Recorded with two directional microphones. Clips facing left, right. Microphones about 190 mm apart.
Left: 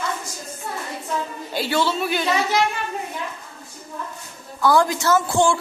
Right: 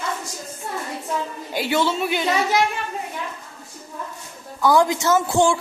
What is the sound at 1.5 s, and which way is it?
Speech, 15° right (ahead or behind).